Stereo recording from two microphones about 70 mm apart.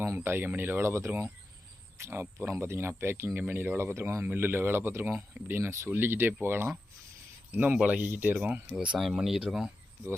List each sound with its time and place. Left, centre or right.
0.2 s speech: right
8.7 s speech: centre
9.0 s speech: centre